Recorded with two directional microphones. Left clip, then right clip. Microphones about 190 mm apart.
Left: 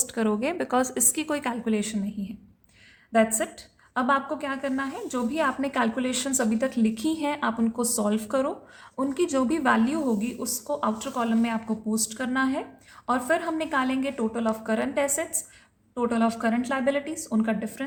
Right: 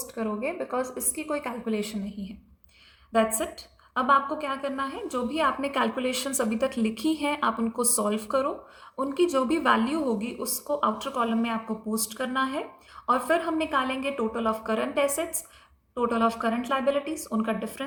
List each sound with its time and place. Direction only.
0.1 s a woman's voice: 50° left (ahead or behind)
3.1 s a woman's voice: 25° left (ahead or behind)